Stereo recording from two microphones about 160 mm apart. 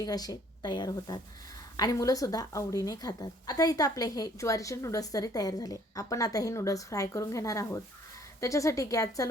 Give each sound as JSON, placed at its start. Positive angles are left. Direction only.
{"t": 0.0, "sound": "a woman's voice", "side_deg": 25}